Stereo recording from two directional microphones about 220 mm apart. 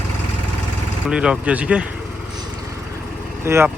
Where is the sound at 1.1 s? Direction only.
5° right (ahead or behind).